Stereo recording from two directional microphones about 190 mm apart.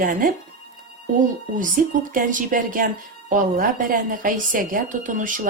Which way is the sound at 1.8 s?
45° right (ahead or behind).